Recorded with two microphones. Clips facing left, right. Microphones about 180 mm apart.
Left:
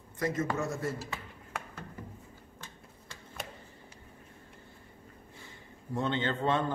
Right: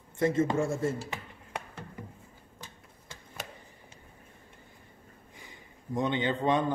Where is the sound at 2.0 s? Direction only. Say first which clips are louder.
Right 1 dB; 15° right (ahead or behind).